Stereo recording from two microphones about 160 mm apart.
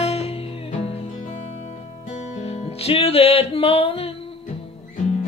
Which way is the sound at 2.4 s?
45° left (ahead or behind).